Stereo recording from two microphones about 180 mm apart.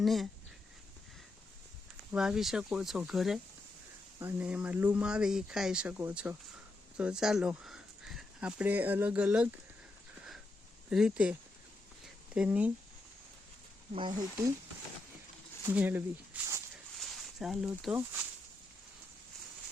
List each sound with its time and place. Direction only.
0.0 s speech: centre (ahead or behind)
2.1 s speech: 5° right (ahead or behind)
10.8 s speech: 5° right (ahead or behind)
12.0 s a sound: 5° right (ahead or behind)
13.9 s speech: 25° right (ahead or behind)
15.6 s speech: 10° right (ahead or behind)
17.0 s a sound: centre (ahead or behind)